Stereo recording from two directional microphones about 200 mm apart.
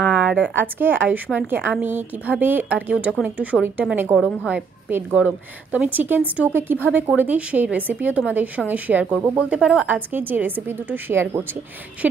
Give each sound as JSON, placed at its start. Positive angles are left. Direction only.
{"t": 0.0, "sound": "a woman's voice", "side_deg": -5}